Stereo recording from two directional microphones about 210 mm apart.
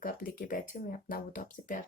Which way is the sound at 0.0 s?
40° left (ahead or behind).